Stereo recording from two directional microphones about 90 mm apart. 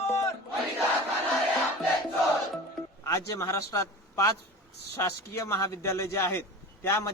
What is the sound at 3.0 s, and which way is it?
A man's voice, 35° left (ahead or behind).